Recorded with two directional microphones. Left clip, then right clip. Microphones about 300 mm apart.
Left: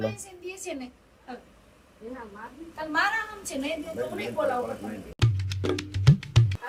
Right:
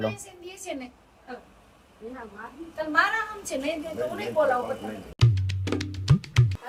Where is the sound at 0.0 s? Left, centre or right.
Centre.